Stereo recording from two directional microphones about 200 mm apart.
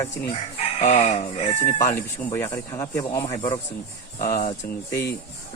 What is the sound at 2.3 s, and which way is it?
A man's voice, 15° left (ahead or behind).